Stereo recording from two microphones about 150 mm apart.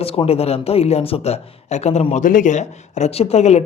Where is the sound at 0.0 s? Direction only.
40° left (ahead or behind).